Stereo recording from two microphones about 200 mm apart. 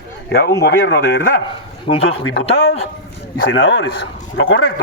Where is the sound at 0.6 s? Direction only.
55° left (ahead or behind).